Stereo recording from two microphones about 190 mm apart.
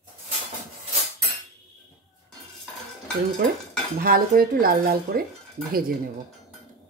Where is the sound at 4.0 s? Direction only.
50° right (ahead or behind).